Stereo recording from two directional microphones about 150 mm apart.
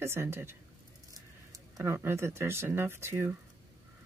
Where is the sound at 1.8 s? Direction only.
15° right (ahead or behind).